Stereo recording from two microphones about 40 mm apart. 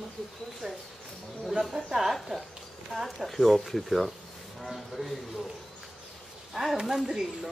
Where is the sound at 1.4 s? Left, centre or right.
Centre.